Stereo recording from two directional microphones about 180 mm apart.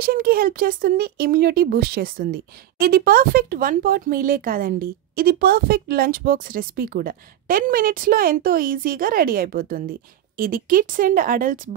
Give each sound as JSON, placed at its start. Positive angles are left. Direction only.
{"t": 0.0, "sound": "speech", "side_deg": -55}